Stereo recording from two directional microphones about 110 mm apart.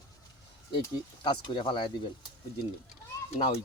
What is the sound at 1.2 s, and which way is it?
Speech, 45° left (ahead or behind).